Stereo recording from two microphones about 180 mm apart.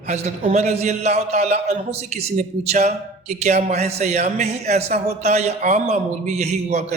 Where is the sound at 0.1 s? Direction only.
40° right (ahead or behind).